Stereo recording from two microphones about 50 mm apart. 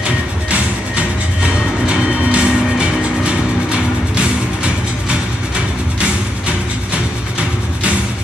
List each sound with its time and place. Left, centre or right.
1.9 s music: centre